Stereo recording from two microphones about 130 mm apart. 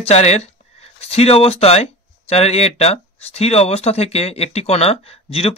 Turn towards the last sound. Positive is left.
turn(degrees=50)  # may be behind; listen again after turning